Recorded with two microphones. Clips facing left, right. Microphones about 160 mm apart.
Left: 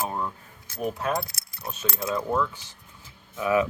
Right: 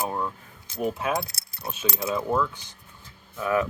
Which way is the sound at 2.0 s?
5° right (ahead or behind).